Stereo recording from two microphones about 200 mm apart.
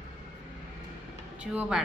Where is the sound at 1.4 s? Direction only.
5° right (ahead or behind).